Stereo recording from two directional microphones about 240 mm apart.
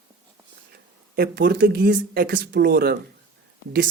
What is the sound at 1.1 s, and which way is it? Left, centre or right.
Speech, right.